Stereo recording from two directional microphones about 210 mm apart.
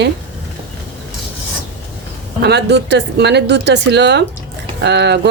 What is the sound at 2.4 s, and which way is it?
Speech, 55° right (ahead or behind).